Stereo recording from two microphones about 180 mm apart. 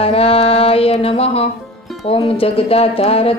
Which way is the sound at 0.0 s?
35° left (ahead or behind).